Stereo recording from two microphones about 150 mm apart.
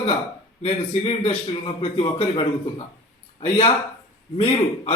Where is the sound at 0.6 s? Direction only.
40° left (ahead or behind).